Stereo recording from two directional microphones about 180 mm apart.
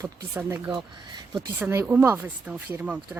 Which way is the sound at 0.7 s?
25° right (ahead or behind).